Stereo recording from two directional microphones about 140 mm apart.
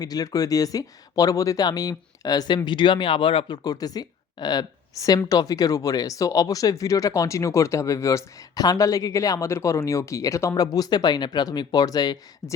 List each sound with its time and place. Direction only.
0.0 s speech: 25° left (ahead or behind)